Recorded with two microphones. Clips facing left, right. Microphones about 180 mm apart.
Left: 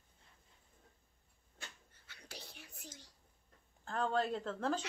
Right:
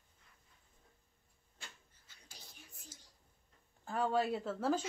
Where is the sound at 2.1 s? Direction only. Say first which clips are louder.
Left 8 dB; 70° left (ahead or behind).